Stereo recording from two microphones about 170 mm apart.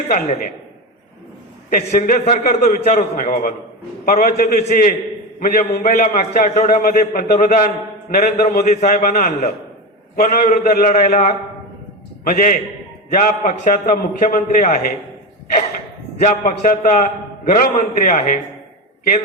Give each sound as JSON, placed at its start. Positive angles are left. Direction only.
{"t": 0.1, "sound": "a man's voice", "side_deg": 50}
{"t": 1.7, "sound": "a man's voice", "side_deg": 55}
{"t": 16.2, "sound": "a man's voice", "side_deg": 55}